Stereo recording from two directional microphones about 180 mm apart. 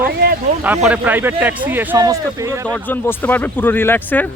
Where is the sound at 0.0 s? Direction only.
55° right (ahead or behind).